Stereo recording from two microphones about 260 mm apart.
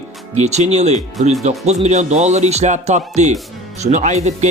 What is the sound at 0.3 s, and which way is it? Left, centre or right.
Speech, right.